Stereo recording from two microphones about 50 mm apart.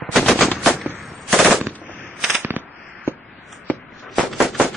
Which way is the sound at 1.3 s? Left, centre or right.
Centre.